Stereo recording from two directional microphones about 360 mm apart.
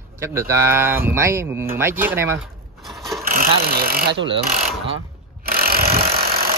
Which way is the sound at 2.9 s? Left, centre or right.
Centre.